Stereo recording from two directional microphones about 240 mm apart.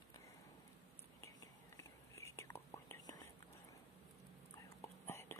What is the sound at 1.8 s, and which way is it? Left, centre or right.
Whispering, centre.